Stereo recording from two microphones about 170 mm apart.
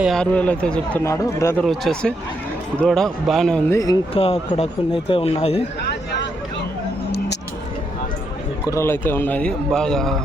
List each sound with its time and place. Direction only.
0.0 s speech: 5° left (ahead or behind)
1.0 s speech: 20° left (ahead or behind)
1.6 s speech: centre (ahead or behind)
3.7 s speech: 20° left (ahead or behind)
4.1 s speech: 35° left (ahead or behind)
5.9 s a sound: 85° left
8.7 s speech: 15° left (ahead or behind)